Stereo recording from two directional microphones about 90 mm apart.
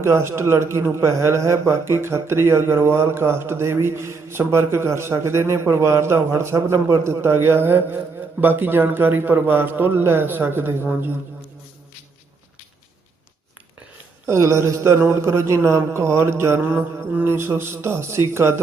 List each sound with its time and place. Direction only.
0.0 s a man's voice: 30° right (ahead or behind)
14.3 s a man's voice: 35° right (ahead or behind)